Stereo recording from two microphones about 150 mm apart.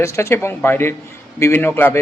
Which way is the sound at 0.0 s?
20° left (ahead or behind).